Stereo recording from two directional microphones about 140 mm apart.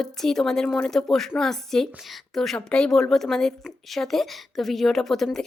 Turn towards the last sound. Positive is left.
turn(degrees=0)  # may be behind; listen again after turning